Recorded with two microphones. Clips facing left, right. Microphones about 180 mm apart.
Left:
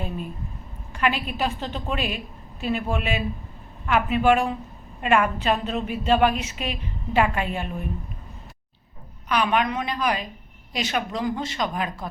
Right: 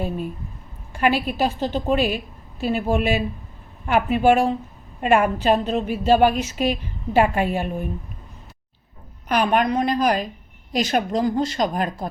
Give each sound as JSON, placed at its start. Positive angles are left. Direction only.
{"t": 0.9, "sound": "a woman's voice", "side_deg": -40}
{"t": 9.3, "sound": "a woman's voice", "side_deg": -45}